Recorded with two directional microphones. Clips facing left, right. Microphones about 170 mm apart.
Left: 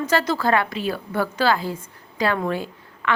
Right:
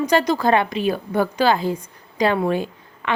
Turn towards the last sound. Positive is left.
turn(degrees=-20)  # may be behind; listen again after turning